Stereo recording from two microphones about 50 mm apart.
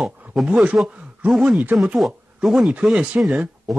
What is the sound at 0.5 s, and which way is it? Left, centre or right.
Speech, right.